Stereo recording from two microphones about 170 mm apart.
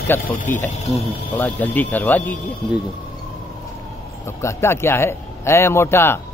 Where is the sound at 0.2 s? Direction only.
55° left (ahead or behind).